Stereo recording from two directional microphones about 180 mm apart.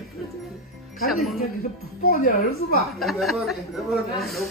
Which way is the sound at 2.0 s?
55° left (ahead or behind).